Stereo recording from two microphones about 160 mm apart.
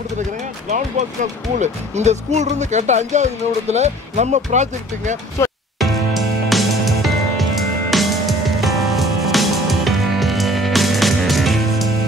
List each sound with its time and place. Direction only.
0.7 s speech: 50° right (ahead or behind)
5.4 s speech: 15° left (ahead or behind)
5.8 s music: centre (ahead or behind)